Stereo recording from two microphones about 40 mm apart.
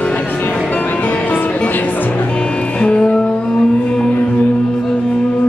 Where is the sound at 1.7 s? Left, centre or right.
Left.